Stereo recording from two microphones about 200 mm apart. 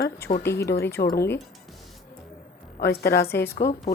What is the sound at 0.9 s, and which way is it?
Speech, 50° left (ahead or behind).